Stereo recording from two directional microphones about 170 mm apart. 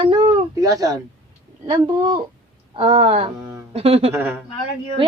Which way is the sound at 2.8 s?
35° right (ahead or behind).